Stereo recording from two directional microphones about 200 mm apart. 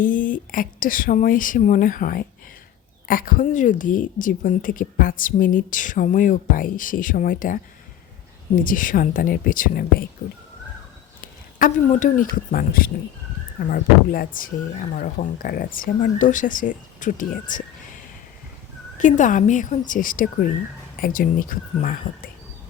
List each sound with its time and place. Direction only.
0.0 s a woman's voice: 40° left (ahead or behind)
11.6 s a woman's voice: 40° left (ahead or behind)
18.9 s a woman's voice: 40° left (ahead or behind)